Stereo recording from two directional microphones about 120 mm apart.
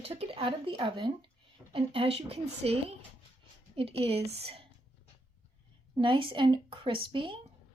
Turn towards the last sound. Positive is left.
turn(degrees=-45)  # may be behind; listen again after turning